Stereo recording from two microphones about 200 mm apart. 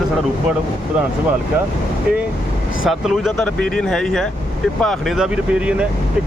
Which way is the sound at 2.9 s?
Centre (ahead or behind).